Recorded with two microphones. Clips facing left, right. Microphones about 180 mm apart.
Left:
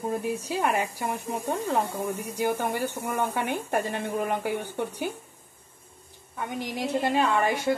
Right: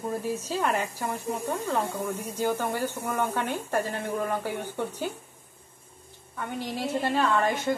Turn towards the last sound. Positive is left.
turn(degrees=10)  # may be behind; listen again after turning